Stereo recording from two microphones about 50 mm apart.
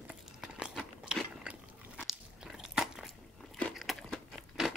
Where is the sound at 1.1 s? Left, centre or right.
Centre.